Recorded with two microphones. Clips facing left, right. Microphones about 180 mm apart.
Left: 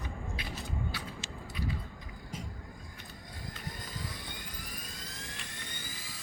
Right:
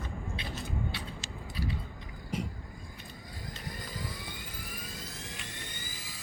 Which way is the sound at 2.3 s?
70° right (ahead or behind).